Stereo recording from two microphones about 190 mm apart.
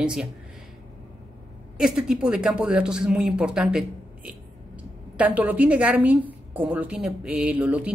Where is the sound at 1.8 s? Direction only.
5° right (ahead or behind).